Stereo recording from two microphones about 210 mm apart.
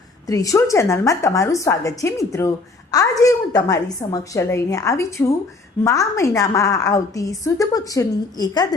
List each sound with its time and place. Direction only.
0.3 s a woman's voice: 15° left (ahead or behind)